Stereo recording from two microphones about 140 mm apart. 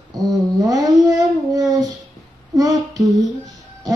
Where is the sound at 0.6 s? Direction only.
25° right (ahead or behind).